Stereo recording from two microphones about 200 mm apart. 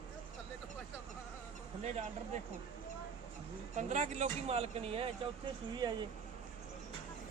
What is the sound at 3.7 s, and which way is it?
Speech, 35° right (ahead or behind).